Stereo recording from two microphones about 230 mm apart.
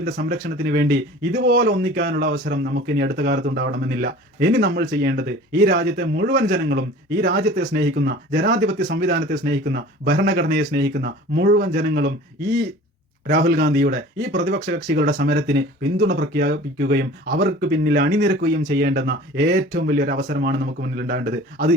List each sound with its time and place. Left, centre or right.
0.0 s speech: right
8.8 s speech: right
13.2 s speech: right
13.7 s speech: right